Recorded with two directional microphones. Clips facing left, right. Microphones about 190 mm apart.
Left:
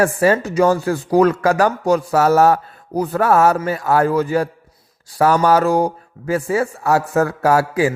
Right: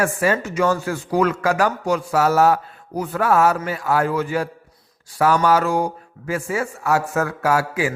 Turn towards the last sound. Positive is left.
turn(degrees=40)  # may be behind; listen again after turning